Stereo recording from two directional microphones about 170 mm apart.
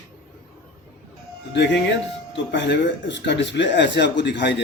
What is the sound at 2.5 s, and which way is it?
Speech, 90° left.